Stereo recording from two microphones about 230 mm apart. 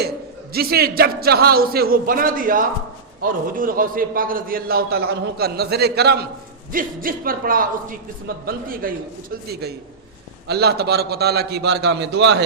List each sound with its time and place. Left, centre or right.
0.5 s a man's voice: right